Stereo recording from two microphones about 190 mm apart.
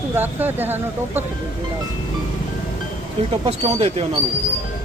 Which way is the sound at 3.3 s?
35° right (ahead or behind).